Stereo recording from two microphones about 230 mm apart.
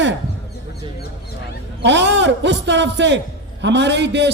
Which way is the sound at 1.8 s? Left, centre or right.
Right.